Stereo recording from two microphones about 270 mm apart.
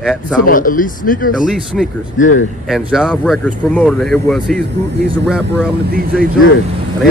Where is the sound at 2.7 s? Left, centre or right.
Centre.